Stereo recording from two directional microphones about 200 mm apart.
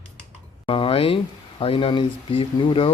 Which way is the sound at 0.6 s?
25° left (ahead or behind).